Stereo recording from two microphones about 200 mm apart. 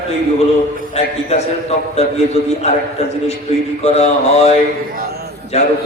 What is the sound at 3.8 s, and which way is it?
Speech, 30° left (ahead or behind).